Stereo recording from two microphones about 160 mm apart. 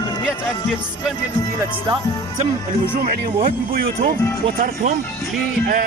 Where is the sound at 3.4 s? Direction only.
65° right (ahead or behind).